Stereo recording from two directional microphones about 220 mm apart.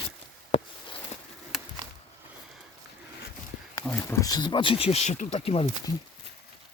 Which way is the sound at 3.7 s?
10° left (ahead or behind).